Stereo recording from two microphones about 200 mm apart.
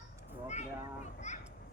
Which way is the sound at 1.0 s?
35° left (ahead or behind).